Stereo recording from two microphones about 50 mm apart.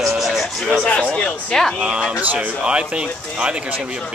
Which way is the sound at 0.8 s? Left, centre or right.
Left.